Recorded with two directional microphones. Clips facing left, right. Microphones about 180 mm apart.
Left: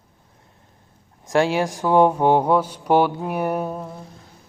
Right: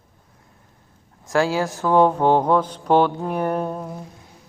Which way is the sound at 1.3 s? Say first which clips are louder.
Left 1 dB; 20° left (ahead or behind).